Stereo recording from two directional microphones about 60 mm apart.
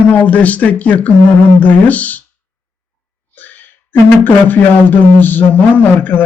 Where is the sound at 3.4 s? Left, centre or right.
Left.